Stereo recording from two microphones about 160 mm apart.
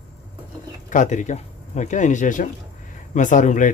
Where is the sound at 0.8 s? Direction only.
50° left (ahead or behind).